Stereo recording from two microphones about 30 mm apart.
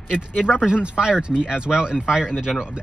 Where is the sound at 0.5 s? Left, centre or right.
Right.